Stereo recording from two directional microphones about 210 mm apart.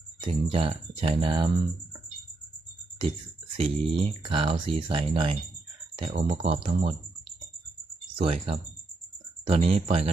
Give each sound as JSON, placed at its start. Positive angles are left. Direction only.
{"t": 0.3, "sound": "speech", "side_deg": -25}
{"t": 3.6, "sound": "speech", "side_deg": -25}
{"t": 8.1, "sound": "speech", "side_deg": -25}